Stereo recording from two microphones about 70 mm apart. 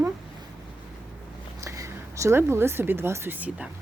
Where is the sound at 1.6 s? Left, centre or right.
Right.